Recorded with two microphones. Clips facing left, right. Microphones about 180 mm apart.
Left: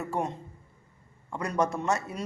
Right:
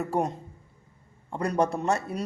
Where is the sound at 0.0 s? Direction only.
35° right (ahead or behind).